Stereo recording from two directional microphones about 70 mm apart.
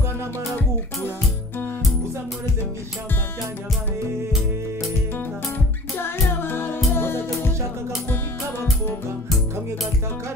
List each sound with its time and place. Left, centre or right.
5.9 s music: left